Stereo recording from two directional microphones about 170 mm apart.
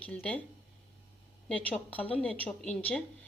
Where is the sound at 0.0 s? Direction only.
10° left (ahead or behind).